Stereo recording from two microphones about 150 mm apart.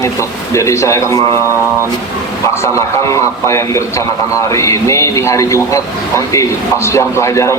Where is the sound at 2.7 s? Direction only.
20° left (ahead or behind).